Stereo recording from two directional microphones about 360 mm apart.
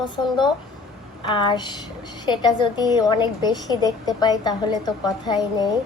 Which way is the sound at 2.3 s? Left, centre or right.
Centre.